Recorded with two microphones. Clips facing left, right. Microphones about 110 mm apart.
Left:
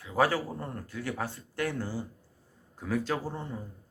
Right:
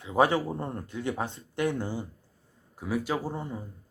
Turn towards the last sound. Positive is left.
turn(degrees=-15)  # may be behind; listen again after turning